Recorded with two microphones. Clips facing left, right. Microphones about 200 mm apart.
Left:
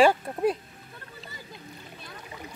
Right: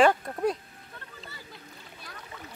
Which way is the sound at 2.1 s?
15° left (ahead or behind).